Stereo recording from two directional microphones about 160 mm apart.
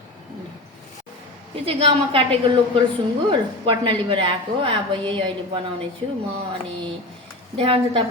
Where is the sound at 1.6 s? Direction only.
35° right (ahead or behind).